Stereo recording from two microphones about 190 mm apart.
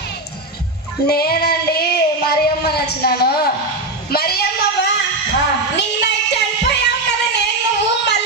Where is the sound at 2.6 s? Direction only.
55° left (ahead or behind).